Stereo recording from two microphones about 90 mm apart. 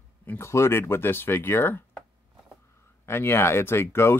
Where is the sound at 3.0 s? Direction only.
25° left (ahead or behind).